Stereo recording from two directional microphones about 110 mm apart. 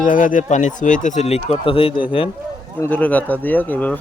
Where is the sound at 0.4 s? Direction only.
90° left; by 2.3 s 55° left (ahead or behind).